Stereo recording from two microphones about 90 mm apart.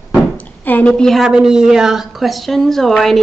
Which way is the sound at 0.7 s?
15° left (ahead or behind).